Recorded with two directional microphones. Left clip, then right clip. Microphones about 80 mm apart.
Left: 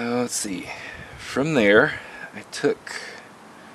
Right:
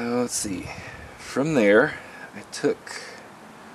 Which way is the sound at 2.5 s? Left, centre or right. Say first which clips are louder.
Left 2 dB; left.